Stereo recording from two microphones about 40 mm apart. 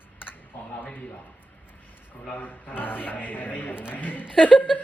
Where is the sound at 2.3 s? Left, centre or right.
Left.